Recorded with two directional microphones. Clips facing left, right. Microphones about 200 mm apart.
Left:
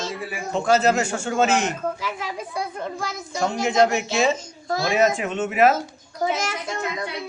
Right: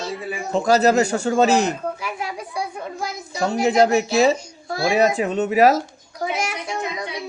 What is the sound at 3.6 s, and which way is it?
A man's voice, 35° right (ahead or behind).